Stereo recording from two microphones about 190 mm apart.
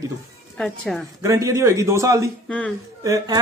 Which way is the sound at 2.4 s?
5° left (ahead or behind).